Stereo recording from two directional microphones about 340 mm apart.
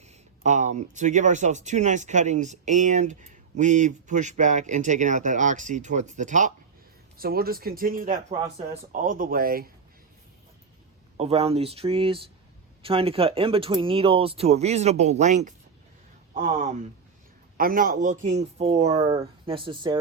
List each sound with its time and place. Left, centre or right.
0.0 s speech: centre
11.2 s speech: centre